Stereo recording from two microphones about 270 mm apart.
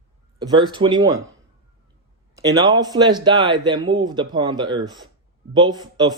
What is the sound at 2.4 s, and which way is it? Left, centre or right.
Speech, centre.